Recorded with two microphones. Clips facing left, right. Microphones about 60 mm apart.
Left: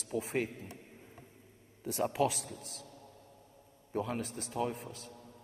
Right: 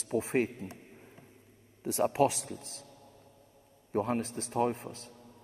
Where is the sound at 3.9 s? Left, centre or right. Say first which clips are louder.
Right 5 dB; right.